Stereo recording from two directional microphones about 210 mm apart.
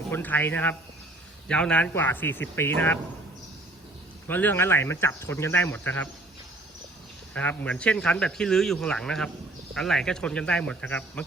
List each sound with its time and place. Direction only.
0.1 s speech: 10° left (ahead or behind)
4.3 s speech: 10° left (ahead or behind)
7.3 s speech: 5° left (ahead or behind)